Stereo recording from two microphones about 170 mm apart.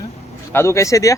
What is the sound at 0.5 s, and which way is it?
Speech, 15° left (ahead or behind).